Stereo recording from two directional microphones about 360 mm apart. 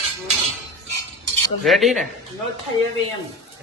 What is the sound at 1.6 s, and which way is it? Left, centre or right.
Speech, centre.